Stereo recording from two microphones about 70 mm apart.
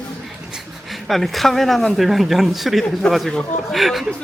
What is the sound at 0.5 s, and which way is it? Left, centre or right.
Speech, centre.